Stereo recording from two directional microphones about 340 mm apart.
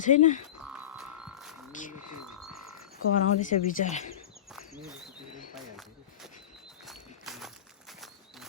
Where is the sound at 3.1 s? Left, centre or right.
Left.